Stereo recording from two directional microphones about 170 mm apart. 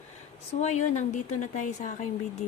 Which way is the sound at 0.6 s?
40° left (ahead or behind).